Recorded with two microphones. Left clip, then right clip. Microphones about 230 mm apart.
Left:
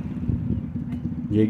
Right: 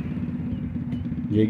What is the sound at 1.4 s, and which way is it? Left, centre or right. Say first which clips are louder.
Speech: left 1 dB; centre.